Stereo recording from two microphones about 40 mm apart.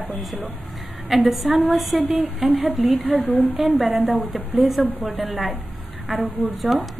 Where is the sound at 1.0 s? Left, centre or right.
Centre.